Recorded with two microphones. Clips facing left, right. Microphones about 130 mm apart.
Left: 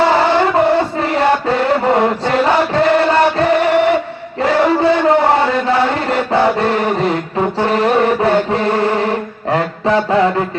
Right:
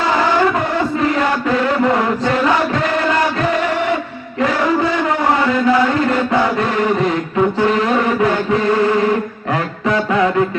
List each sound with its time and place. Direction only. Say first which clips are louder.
1.0 s chant: left 2 dB; 30° left (ahead or behind)
4.4 s a sound: left 3 dB; 30° left (ahead or behind)
6.1 s chant: left 2 dB; 30° left (ahead or behind)
9.5 s mantra: left 4 dB; 30° left (ahead or behind)